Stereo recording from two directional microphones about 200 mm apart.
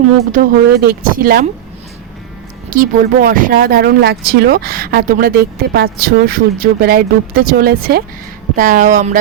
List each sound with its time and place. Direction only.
0.3 s speech: 45° right (ahead or behind)
2.6 s speech: 45° right (ahead or behind)